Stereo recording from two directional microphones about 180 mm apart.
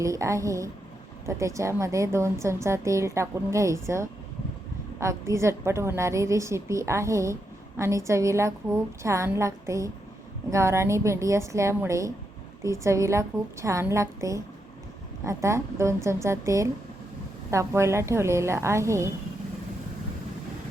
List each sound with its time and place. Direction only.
0.0 s a woman's voice: 15° right (ahead or behind)